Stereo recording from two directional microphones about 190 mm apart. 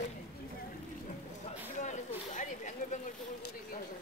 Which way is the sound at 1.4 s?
40° left (ahead or behind).